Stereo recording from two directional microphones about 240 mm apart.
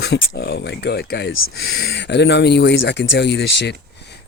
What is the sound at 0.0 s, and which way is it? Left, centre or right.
Speech, left.